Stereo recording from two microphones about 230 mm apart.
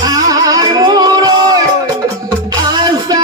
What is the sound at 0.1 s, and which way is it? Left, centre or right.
Music, centre.